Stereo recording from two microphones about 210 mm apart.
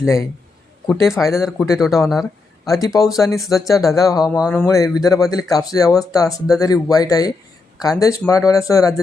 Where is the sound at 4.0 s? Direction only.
15° left (ahead or behind).